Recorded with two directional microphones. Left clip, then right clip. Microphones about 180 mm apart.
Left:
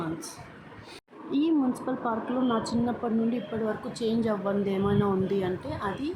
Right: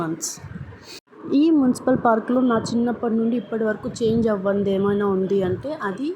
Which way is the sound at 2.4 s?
25° right (ahead or behind).